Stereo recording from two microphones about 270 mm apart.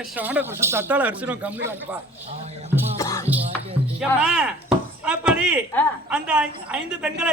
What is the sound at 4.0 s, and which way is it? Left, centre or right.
Chopping, centre.